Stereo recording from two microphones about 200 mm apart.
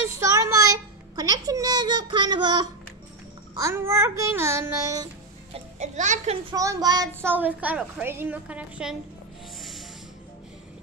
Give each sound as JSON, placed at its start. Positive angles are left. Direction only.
{"t": 0.2, "sound": "a sound", "side_deg": -15}
{"t": 3.5, "sound": "a child's voice", "side_deg": -15}
{"t": 5.8, "sound": "a child's voice", "side_deg": -35}
{"t": 6.5, "sound": "a child's voice", "side_deg": -15}
{"t": 9.6, "sound": "snort", "side_deg": 0}